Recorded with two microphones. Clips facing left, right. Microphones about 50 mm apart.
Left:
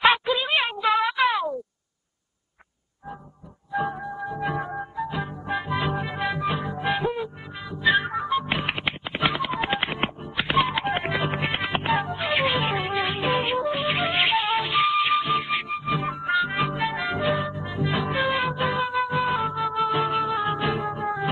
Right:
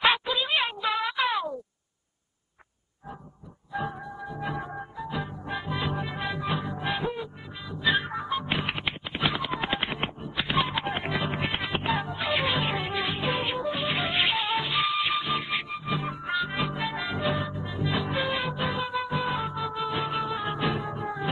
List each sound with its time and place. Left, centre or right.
0.0 s a sound: centre
0.9 s music: left
1.2 s a sound: centre
4.6 s music: centre
5.8 s music: centre
6.0 s music: centre
6.7 s music: centre; by 10.4 s left
10.4 s music: centre
11.0 s music: left
12.9 s music: left
13.2 s music: centre